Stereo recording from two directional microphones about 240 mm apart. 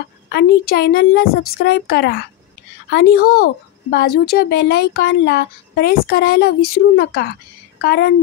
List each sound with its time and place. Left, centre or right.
0.3 s speech: left